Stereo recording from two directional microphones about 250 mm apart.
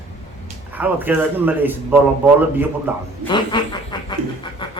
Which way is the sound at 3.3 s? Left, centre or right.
Centre.